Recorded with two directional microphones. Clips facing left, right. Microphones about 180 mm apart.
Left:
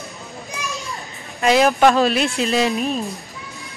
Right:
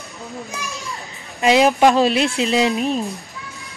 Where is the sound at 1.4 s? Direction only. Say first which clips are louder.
Right 1 dB; 15° right (ahead or behind).